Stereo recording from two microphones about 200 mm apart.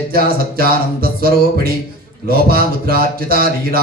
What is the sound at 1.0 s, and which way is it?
Mantra, 50° right (ahead or behind).